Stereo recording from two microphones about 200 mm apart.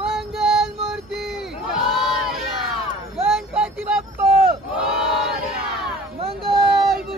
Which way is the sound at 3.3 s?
5° right (ahead or behind).